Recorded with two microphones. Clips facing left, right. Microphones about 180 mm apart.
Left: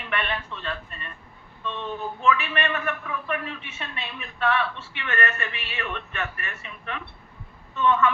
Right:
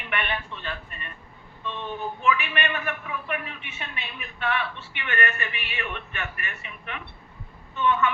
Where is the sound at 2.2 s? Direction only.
20° right (ahead or behind).